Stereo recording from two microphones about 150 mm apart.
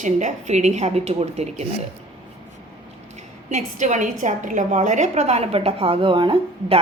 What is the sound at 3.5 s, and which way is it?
A woman's voice, 55° right (ahead or behind).